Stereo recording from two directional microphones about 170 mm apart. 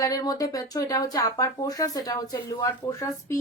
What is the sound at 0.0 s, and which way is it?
Speech, 20° left (ahead or behind).